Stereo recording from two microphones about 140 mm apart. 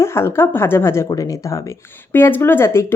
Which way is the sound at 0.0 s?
20° left (ahead or behind).